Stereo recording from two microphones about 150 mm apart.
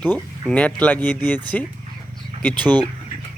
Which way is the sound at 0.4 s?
10° left (ahead or behind).